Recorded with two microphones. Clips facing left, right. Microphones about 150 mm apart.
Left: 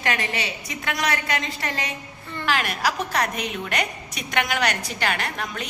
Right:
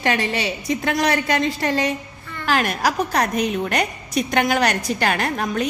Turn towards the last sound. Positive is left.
turn(degrees=-45)  # may be behind; listen again after turning